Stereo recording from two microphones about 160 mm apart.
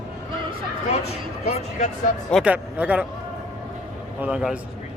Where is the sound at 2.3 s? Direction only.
5° right (ahead or behind).